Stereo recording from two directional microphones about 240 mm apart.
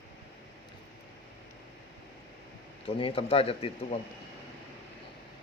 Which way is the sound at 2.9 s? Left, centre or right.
Left.